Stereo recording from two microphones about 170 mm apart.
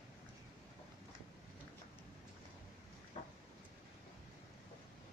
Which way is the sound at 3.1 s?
35° left (ahead or behind).